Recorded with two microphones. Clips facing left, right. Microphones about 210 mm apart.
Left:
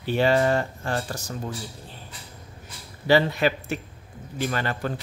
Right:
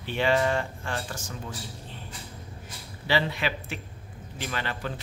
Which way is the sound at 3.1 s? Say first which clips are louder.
Left 7 dB; 45° left (ahead or behind).